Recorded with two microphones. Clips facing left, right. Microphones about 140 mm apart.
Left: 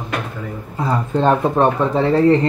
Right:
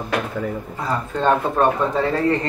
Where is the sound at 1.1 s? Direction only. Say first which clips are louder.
Left 3 dB; 25° left (ahead or behind).